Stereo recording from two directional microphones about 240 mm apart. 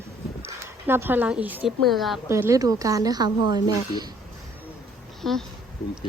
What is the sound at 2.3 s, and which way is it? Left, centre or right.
Speech, centre.